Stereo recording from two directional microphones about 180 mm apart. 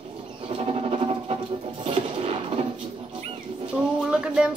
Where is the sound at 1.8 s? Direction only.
35° right (ahead or behind).